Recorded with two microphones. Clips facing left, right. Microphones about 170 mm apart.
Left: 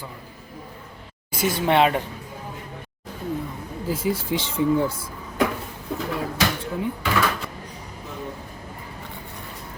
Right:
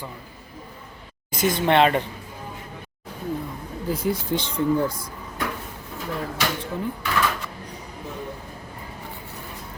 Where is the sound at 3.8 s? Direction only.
Centre (ahead or behind).